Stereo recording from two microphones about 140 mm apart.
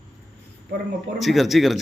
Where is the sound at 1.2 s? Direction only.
Centre (ahead or behind).